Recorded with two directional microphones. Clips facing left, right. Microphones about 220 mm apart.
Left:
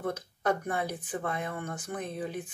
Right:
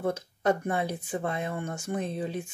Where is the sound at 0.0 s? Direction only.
25° right (ahead or behind).